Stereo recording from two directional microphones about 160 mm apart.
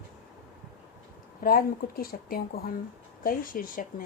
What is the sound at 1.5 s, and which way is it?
A woman's voice, 65° left (ahead or behind).